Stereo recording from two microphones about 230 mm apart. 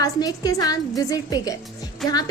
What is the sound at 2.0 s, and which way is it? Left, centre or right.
Music, centre.